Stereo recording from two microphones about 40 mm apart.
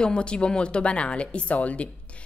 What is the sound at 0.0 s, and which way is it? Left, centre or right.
A woman's voice, left.